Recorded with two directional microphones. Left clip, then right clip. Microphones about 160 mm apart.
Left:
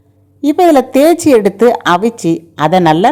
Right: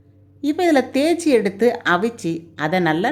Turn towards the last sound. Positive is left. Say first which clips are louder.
# left 10 dB
turn(degrees=40)  # may be behind; listen again after turning